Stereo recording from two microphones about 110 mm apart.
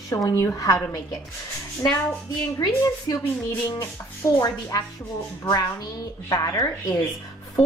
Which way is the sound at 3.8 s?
30° left (ahead or behind).